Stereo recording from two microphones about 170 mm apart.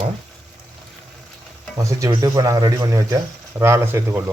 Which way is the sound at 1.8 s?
20° right (ahead or behind).